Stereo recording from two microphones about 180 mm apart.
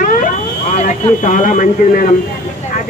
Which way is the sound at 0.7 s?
45° left (ahead or behind).